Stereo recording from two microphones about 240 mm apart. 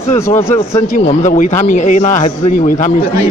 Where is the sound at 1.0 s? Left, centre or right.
Left.